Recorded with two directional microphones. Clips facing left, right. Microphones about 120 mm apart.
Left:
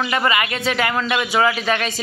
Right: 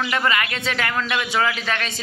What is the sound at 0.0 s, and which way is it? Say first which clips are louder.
Speech: left 2 dB; 10° left (ahead or behind).